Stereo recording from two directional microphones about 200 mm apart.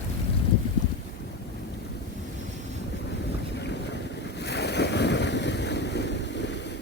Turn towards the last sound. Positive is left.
turn(degrees=60)  # may be behind; listen again after turning